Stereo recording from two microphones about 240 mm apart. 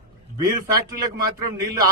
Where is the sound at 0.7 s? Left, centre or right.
Centre.